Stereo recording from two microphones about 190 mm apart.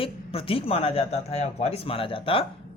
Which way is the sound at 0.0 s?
30° left (ahead or behind).